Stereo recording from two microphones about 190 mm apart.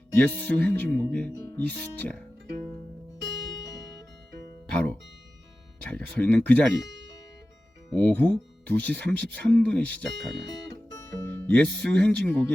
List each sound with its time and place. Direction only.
0.2 s speech: 5° left (ahead or behind)
1.3 s speech: 15° left (ahead or behind)
4.7 s speech: 5° left (ahead or behind)
7.9 s speech: 10° left (ahead or behind)
10.9 s music: 10° left (ahead or behind)
11.8 s speech: 5° left (ahead or behind)